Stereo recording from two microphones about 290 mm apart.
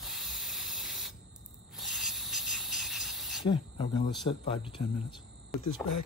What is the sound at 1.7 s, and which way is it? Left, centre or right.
Rub, centre.